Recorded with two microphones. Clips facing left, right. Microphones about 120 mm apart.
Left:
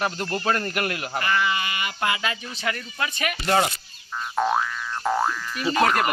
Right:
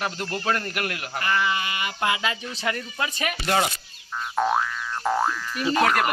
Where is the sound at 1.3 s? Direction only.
25° right (ahead or behind).